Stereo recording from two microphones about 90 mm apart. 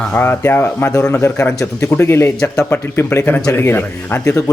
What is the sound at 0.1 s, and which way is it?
Speech, 25° left (ahead or behind).